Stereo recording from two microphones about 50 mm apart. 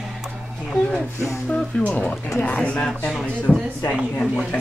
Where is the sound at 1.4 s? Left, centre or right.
Centre.